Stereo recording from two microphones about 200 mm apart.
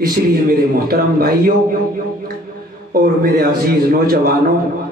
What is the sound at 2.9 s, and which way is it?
A man's voice, 45° right (ahead or behind).